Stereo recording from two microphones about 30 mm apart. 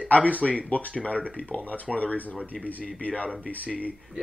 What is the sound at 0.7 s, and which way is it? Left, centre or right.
Speech, left.